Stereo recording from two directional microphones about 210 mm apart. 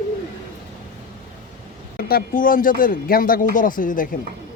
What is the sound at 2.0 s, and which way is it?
Speech, 45° left (ahead or behind).